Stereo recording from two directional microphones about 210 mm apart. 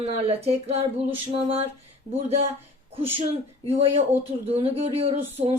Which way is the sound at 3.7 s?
30° right (ahead or behind).